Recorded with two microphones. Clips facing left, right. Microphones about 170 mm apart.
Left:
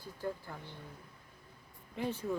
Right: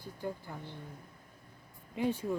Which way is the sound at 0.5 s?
5° right (ahead or behind).